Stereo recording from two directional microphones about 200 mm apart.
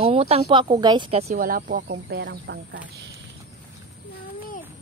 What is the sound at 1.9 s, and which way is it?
Speech, 60° right (ahead or behind).